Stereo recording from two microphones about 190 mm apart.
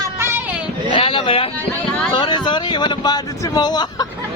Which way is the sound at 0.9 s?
25° left (ahead or behind).